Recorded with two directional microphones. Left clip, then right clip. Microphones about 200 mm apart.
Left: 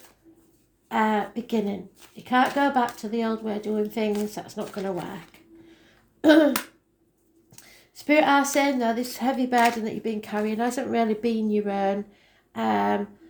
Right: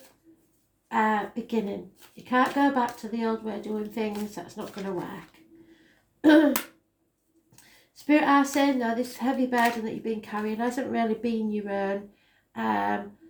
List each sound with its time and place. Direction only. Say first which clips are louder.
0.9 s a woman's voice: left 1 dB; 45° left (ahead or behind)
6.2 s a woman's voice: left 2 dB; 45° left (ahead or behind)
7.5 s a woman's voice: left 5 dB; 45° left (ahead or behind)